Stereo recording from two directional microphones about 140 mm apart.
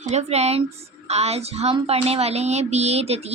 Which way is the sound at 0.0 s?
50° right (ahead or behind).